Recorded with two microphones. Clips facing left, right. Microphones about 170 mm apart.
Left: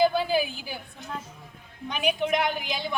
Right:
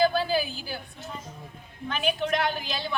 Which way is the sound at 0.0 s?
20° left (ahead or behind).